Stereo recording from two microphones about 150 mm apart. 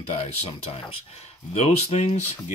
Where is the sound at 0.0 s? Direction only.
45° left (ahead or behind).